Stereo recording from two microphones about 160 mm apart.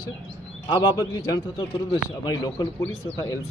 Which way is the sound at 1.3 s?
25° left (ahead or behind).